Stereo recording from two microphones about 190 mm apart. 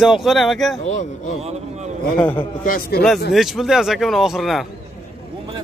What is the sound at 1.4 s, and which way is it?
Speech, 35° right (ahead or behind).